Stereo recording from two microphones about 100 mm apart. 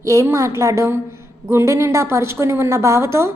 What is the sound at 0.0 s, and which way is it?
A woman's voice, 35° right (ahead or behind).